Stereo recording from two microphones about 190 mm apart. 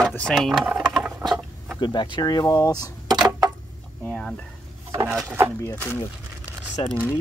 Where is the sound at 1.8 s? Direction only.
25° left (ahead or behind).